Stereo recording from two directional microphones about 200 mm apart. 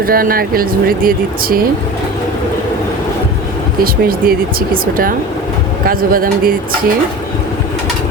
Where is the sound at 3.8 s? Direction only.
45° right (ahead or behind).